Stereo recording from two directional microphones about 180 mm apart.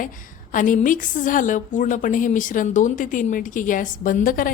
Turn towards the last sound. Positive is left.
turn(degrees=50)  # may be behind; listen again after turning